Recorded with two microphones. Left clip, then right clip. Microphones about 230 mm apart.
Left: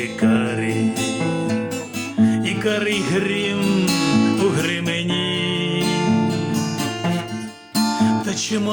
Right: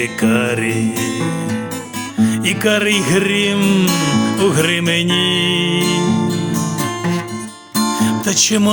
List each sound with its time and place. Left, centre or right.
0.2 s music: right
2.2 s music: right
7.9 s music: right